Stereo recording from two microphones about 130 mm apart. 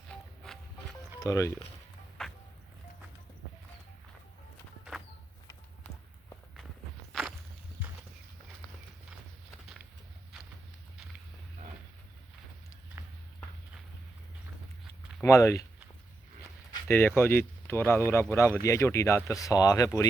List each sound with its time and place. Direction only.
0.1 s music: 10° left (ahead or behind)
1.2 s speech: 25° left (ahead or behind)
2.2 s music: 5° left (ahead or behind)
7.1 s walk: 5° right (ahead or behind)
15.2 s speech: 20° left (ahead or behind)
16.9 s speech: 15° left (ahead or behind)